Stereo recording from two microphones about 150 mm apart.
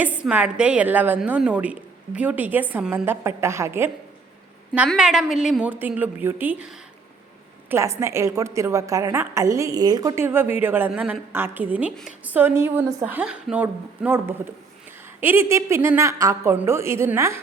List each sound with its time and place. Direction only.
0.0 s a woman's voice: 10° right (ahead or behind)
4.9 s a woman's voice: 5° right (ahead or behind)